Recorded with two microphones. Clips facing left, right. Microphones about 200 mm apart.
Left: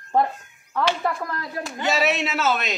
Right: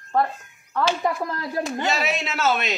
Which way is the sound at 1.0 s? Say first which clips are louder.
Right 2 dB; 25° right (ahead or behind).